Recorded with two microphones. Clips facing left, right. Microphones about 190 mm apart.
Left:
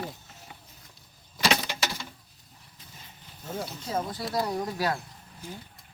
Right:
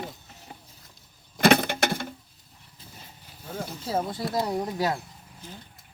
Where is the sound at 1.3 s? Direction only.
55° right (ahead or behind).